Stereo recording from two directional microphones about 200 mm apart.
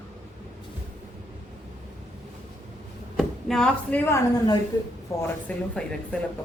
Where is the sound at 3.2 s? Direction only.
Centre (ahead or behind).